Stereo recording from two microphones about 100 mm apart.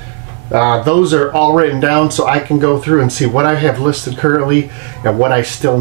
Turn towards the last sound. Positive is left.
turn(degrees=-20)  # may be behind; listen again after turning